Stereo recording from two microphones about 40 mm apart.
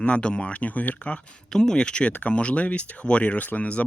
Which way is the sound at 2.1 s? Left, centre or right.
Left.